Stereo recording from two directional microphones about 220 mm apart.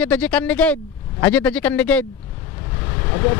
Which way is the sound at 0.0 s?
5° left (ahead or behind).